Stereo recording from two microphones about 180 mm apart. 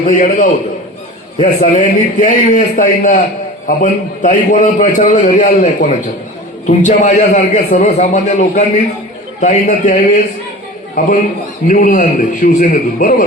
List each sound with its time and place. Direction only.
0.2 s a man's voice: 45° left (ahead or behind)
11.7 s a man's voice: 50° left (ahead or behind)